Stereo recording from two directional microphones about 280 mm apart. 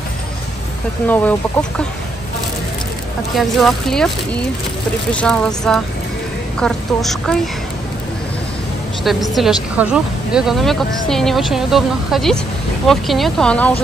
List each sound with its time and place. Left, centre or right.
1.0 s a woman's voice: centre
3.3 s a woman's voice: centre
9.0 s a woman's voice: centre